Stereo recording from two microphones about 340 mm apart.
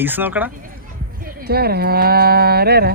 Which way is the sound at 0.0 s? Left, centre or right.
Centre.